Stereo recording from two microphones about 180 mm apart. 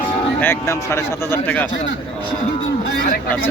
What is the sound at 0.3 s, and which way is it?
Speech, 10° left (ahead or behind).